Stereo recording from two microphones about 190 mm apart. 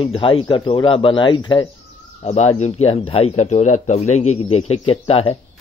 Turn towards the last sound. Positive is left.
turn(degrees=30)  # may be behind; listen again after turning